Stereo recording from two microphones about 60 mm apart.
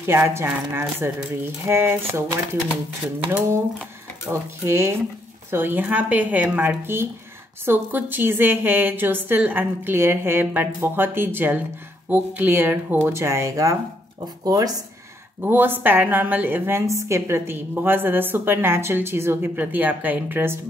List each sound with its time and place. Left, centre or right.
0.0 s speech: right
4.3 s speech: right
5.5 s a woman's voice: right
9.9 s a woman's voice: right
13.0 s speech: right
14.4 s speech: right
15.4 s a woman's voice: right
16.8 s speech: right
17.7 s a woman's voice: right
19.5 s speech: right